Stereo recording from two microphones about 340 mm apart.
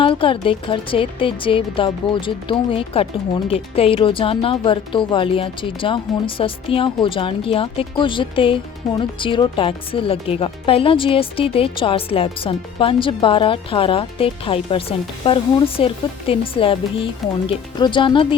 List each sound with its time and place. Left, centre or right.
0.0 s speech: centre